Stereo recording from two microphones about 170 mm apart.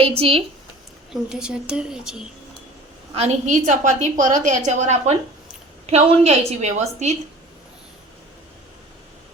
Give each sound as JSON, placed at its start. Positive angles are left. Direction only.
{"t": 0.2, "sound": "a woman's voice", "side_deg": -35}
{"t": 1.1, "sound": "a woman's voice", "side_deg": -5}
{"t": 3.2, "sound": "a woman's voice", "side_deg": -45}